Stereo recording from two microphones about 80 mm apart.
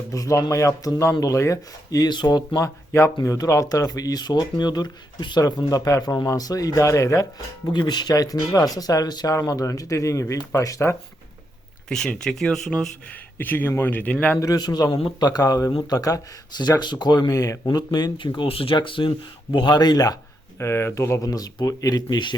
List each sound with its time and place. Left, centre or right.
0.1 s speech: left
2.0 s speech: left
2.6 s speech: left
5.6 s speech: left
7.7 s speech: left
11.9 s speech: centre
13.4 s speech: left
14.3 s speech: left
19.5 s speech: left
20.6 s speech: left